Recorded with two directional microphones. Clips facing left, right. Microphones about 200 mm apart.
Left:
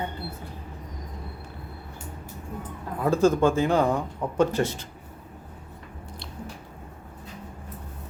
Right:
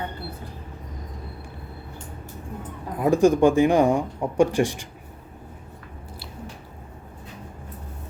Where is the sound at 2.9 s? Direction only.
15° right (ahead or behind).